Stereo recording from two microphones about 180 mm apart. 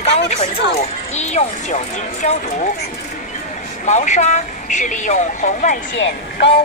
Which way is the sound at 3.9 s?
40° left (ahead or behind).